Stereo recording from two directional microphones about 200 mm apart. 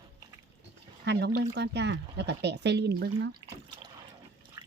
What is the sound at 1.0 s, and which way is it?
Speech, 55° right (ahead or behind).